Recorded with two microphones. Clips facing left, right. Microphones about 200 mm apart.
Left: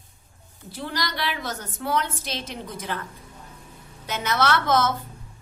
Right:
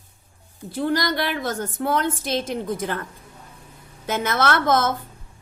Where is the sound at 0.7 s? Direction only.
50° right (ahead or behind).